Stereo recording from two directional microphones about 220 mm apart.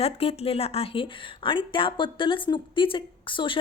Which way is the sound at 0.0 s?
25° left (ahead or behind).